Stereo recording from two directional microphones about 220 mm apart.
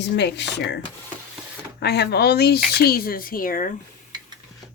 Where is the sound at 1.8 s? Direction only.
50° left (ahead or behind).